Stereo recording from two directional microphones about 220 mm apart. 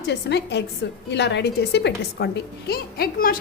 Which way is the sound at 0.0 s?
50° left (ahead or behind).